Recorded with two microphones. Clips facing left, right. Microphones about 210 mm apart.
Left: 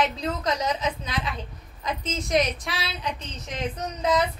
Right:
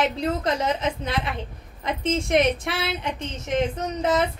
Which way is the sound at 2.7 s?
55° right (ahead or behind).